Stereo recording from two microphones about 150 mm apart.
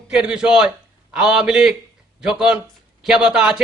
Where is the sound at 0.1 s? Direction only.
5° right (ahead or behind).